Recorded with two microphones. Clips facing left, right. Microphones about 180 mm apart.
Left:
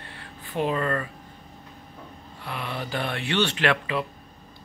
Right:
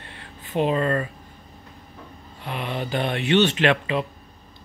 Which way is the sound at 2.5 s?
20° right (ahead or behind).